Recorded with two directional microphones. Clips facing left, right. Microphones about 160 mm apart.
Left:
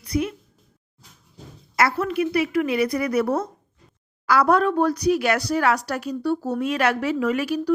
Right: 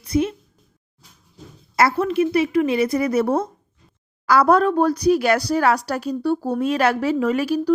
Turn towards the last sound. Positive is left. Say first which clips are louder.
# right 3 dB
turn(degrees=-35)  # may be behind; listen again after turning